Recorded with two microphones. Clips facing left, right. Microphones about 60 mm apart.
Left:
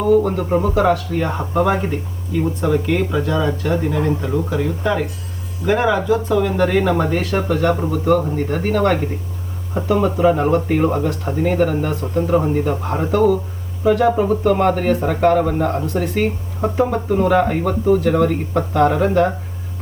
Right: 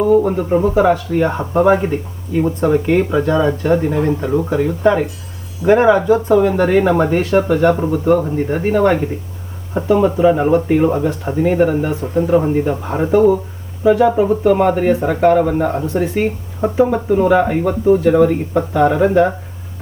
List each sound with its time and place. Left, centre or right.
0.0 s speech: centre